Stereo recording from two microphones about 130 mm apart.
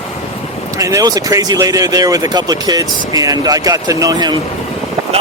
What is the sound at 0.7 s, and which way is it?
Speech, 25° right (ahead or behind).